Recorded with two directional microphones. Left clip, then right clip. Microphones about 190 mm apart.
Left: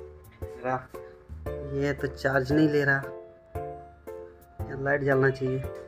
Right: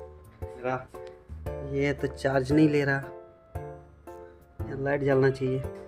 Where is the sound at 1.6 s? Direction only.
5° right (ahead or behind).